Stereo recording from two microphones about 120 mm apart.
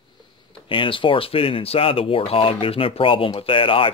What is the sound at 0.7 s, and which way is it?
Speech, 45° left (ahead or behind).